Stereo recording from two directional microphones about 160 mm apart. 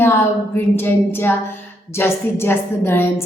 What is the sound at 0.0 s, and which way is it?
A woman's voice, 15° left (ahead or behind).